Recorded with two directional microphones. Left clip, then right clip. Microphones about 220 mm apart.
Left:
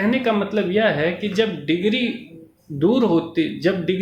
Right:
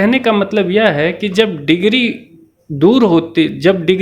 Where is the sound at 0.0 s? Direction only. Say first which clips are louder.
Right 7 dB; 45° right (ahead or behind).